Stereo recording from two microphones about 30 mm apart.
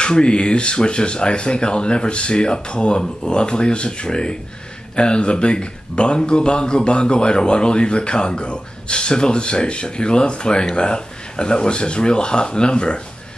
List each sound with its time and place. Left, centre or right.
0.0 s speech: left